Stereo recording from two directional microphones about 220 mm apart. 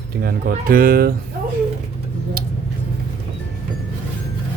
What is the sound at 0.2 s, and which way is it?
Speech, 45° right (ahead or behind).